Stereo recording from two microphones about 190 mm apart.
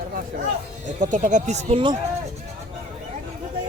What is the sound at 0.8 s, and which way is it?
Speech, 40° right (ahead or behind).